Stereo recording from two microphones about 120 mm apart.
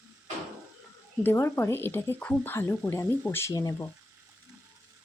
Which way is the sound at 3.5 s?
30° left (ahead or behind).